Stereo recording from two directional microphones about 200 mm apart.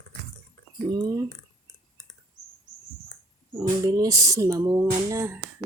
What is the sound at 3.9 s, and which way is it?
Speech, 20° right (ahead or behind).